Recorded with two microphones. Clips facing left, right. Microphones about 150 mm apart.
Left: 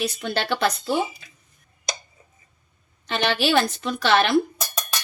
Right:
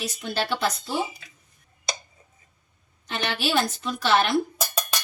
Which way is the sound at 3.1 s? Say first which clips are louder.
Left 5 dB; 75° left (ahead or behind).